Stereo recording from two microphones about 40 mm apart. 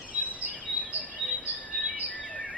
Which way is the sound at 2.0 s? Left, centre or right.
Left.